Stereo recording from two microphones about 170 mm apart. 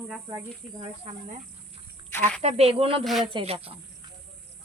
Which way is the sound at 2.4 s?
40° right (ahead or behind).